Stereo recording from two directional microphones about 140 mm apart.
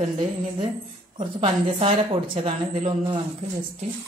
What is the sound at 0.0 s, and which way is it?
Speech, 55° right (ahead or behind).